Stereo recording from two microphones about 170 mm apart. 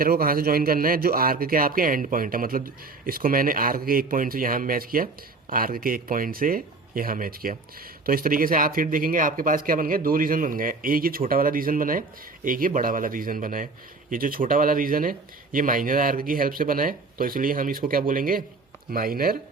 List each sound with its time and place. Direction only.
0.0 s a man's voice: 60° right (ahead or behind)